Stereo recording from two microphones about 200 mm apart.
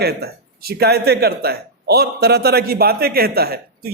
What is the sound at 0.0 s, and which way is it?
Speech, 50° right (ahead or behind).